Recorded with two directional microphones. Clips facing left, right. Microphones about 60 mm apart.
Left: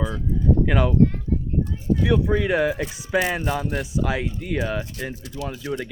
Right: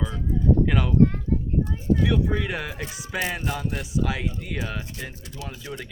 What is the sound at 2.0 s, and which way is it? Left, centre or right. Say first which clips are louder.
Speech: left 5 dB; centre.